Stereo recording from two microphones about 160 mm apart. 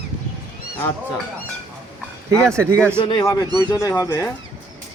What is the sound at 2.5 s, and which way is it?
Speech, 20° right (ahead or behind).